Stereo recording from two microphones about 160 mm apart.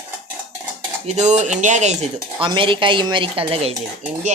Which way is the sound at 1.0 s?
45° right (ahead or behind).